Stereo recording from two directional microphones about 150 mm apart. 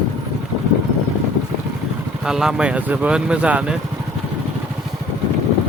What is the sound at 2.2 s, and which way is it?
Speech, 5° right (ahead or behind).